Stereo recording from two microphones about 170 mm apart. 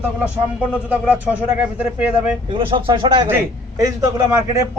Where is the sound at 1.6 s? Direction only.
10° right (ahead or behind).